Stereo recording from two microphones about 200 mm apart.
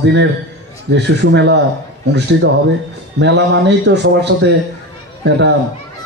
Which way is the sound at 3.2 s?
60° right (ahead or behind).